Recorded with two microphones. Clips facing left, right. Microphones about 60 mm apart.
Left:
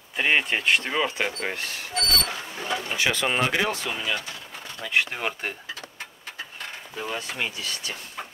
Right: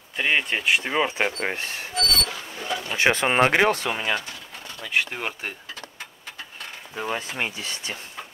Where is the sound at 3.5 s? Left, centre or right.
Right.